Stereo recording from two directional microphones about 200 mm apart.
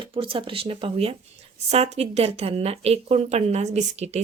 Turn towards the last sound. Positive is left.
turn(degrees=-35)  # may be behind; listen again after turning